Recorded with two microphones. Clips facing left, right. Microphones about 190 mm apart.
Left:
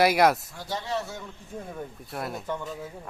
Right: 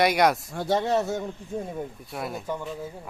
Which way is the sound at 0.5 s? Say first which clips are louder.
Right 8 dB; 55° right (ahead or behind).